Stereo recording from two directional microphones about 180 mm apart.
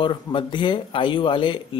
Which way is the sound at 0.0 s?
30° left (ahead or behind).